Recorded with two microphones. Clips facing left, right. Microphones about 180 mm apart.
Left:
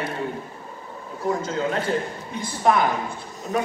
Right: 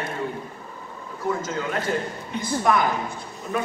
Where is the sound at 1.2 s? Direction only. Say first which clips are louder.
Left 2 dB; 35° left (ahead or behind).